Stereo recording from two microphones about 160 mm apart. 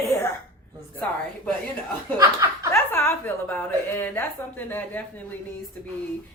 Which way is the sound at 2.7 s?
15° left (ahead or behind).